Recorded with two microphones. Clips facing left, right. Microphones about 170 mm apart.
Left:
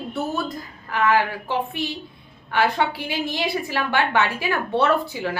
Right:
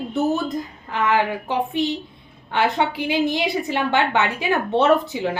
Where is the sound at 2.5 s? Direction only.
20° right (ahead or behind).